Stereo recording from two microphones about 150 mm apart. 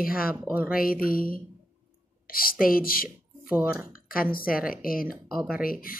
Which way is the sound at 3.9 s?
75° left (ahead or behind).